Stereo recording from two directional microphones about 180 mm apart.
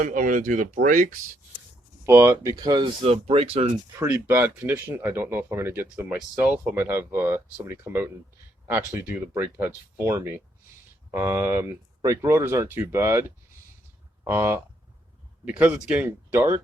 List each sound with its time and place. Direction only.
0.0 s speech: 45° right (ahead or behind)
2.0 s speech: 15° right (ahead or behind); by 3.7 s 35° right (ahead or behind)
4.0 s speech: 10° right (ahead or behind)